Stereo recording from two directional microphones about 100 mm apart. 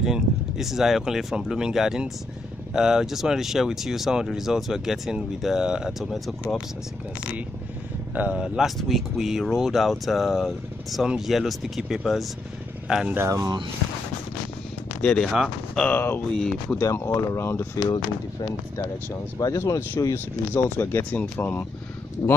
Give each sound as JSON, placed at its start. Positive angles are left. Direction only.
{"t": 0.0, "sound": "speech", "side_deg": -5}
{"t": 8.1, "sound": "speech", "side_deg": -15}
{"t": 13.1, "sound": "speech", "side_deg": -30}
{"t": 15.0, "sound": "speech", "side_deg": 15}
{"t": 15.2, "sound": "speech", "side_deg": -5}
{"t": 15.8, "sound": "speech", "side_deg": 20}
{"t": 16.3, "sound": "speech", "side_deg": 5}
{"t": 16.8, "sound": "speech", "side_deg": 30}
{"t": 17.8, "sound": "speech", "side_deg": 45}
{"t": 19.3, "sound": "speech", "side_deg": 30}